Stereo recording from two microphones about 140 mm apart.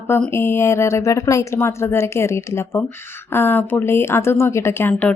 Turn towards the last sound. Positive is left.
turn(degrees=10)  # may be behind; listen again after turning